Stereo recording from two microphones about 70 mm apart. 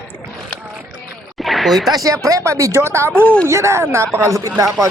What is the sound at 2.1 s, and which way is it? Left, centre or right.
Speech, right.